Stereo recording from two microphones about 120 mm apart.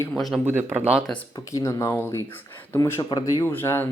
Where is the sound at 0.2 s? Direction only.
Centre (ahead or behind).